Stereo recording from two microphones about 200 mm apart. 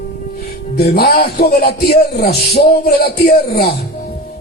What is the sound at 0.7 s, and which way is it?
A man's voice, 50° left (ahead or behind).